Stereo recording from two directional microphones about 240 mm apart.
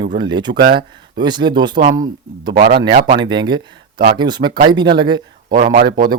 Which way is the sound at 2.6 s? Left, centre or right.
Right.